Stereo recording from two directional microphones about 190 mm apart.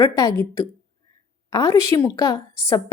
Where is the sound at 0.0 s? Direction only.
20° left (ahead or behind).